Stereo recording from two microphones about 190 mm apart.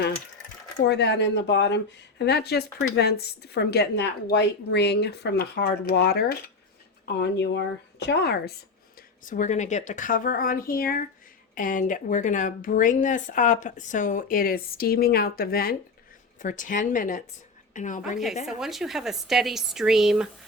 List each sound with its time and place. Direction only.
0.9 s speech: 65° left (ahead or behind)
9.2 s a woman's voice: 40° left (ahead or behind)
18.4 s speech: centre (ahead or behind)